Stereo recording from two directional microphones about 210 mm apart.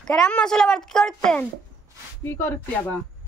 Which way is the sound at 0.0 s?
5° left (ahead or behind).